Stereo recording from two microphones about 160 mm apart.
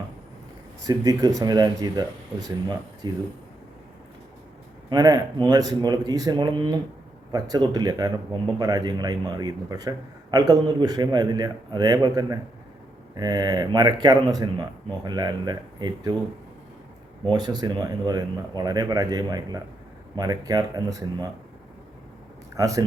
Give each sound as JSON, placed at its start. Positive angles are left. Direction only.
{"t": 0.9, "sound": "speech", "side_deg": -20}
{"t": 4.9, "sound": "speech", "side_deg": -25}
{"t": 17.2, "sound": "speech", "side_deg": -25}
{"t": 22.5, "sound": "speech", "side_deg": -20}